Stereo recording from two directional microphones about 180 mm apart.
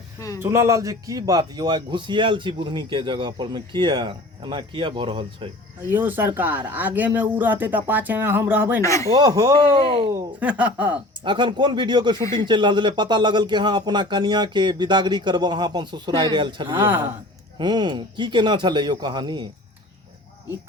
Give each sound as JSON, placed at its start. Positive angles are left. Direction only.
{"t": 0.3, "sound": "a man's voice", "side_deg": -15}
{"t": 5.9, "sound": "speech", "side_deg": -10}
{"t": 8.8, "sound": "speech", "side_deg": 15}
{"t": 9.1, "sound": "a man's voice", "side_deg": -20}
{"t": 10.2, "sound": "speech", "side_deg": -10}
{"t": 11.2, "sound": "a man's voice", "side_deg": -25}
{"t": 16.9, "sound": "speech", "side_deg": -10}
{"t": 17.6, "sound": "a man's voice", "side_deg": -25}